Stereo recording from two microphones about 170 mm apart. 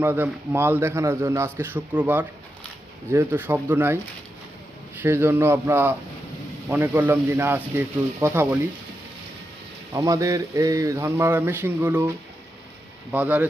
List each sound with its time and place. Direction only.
0.0 s a man's voice: 10° right (ahead or behind)
4.9 s a man's voice: 15° right (ahead or behind)
9.9 s a man's voice: 20° right (ahead or behind)